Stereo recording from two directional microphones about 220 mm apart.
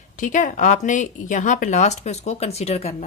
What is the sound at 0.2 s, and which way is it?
Speech, 35° left (ahead or behind).